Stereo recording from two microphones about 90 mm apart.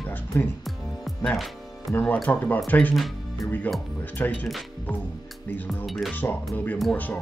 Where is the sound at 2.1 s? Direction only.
20° left (ahead or behind).